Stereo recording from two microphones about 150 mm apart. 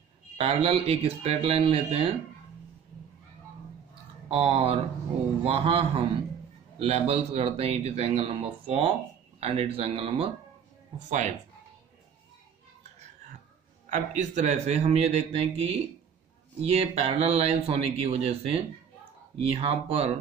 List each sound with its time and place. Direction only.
0.4 s speech: 40° right (ahead or behind)
4.3 s speech: 40° right (ahead or behind)
11.0 s speech: 50° right (ahead or behind)
13.8 s speech: 55° right (ahead or behind); by 20.1 s 40° right (ahead or behind)